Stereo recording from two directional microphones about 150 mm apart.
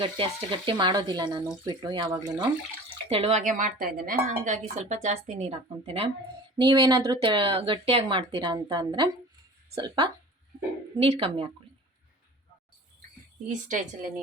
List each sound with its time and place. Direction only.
0.0 s speech: 35° right (ahead or behind)
3.1 s speech: 40° right (ahead or behind)
3.4 s a woman's voice: 65° right (ahead or behind); by 6.1 s 40° right (ahead or behind)
6.6 s speech: 25° right (ahead or behind)
10.9 s speech: 40° right (ahead or behind)
13.5 s a woman's voice: 55° right (ahead or behind)